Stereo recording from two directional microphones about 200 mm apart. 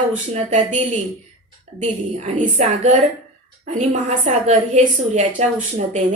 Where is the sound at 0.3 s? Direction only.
35° right (ahead or behind).